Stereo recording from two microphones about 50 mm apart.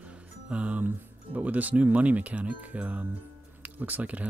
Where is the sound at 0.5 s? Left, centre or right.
Right.